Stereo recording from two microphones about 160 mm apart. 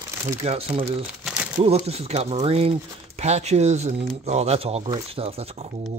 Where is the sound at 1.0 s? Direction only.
5° right (ahead or behind).